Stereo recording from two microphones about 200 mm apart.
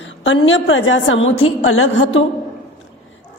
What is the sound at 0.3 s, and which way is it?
A woman's voice, 70° left (ahead or behind).